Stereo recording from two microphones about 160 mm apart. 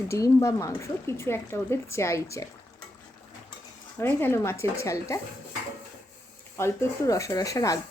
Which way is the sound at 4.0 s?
15° left (ahead or behind).